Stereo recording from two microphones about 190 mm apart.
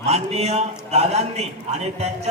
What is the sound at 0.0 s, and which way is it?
A man's voice, 35° right (ahead or behind).